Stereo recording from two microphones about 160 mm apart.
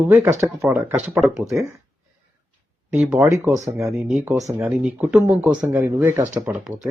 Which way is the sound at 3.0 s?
5° right (ahead or behind).